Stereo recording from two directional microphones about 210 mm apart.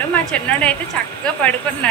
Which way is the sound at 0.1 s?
5° left (ahead or behind).